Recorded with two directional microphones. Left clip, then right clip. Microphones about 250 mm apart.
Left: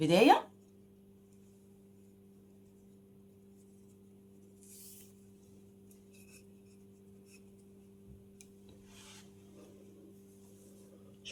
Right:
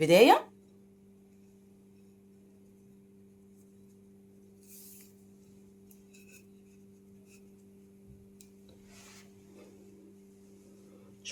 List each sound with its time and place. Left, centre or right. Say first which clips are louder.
0.0 s speech: right 5 dB; right